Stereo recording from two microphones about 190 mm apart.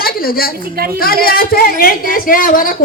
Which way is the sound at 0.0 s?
50° left (ahead or behind).